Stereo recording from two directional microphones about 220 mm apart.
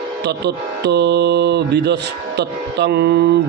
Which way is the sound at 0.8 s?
50° right (ahead or behind).